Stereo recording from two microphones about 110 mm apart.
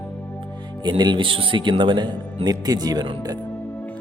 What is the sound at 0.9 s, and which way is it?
Speech, 45° right (ahead or behind).